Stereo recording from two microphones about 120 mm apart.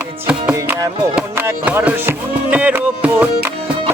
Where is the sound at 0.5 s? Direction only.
30° right (ahead or behind).